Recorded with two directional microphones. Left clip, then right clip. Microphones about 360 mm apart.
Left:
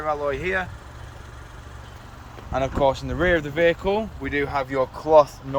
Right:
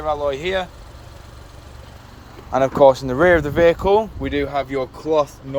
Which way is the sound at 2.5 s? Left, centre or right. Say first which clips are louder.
Right 8 dB; centre.